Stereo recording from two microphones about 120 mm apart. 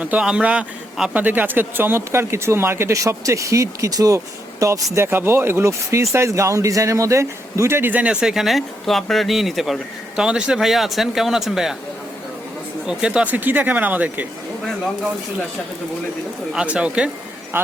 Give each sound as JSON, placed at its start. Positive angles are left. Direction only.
{"t": 0.0, "sound": "a man's voice", "side_deg": -10}
{"t": 12.8, "sound": "speech", "side_deg": -5}
{"t": 16.5, "sound": "speech", "side_deg": -5}